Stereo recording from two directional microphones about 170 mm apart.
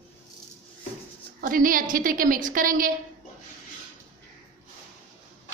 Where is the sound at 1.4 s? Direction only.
55° right (ahead or behind).